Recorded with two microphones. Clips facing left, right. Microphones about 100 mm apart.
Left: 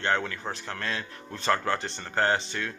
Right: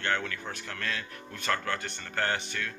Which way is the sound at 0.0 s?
25° left (ahead or behind).